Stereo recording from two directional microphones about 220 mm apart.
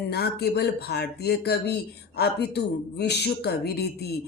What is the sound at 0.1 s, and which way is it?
Speech, 45° left (ahead or behind).